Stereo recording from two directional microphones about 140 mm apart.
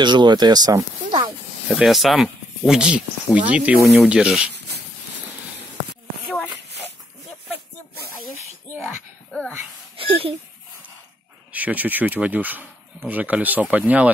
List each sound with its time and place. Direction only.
0.0 s speech: 30° right (ahead or behind)
1.7 s speech: 5° right (ahead or behind)
9.9 s a sound: 40° right (ahead or behind)
11.5 s speech: 10° right (ahead or behind)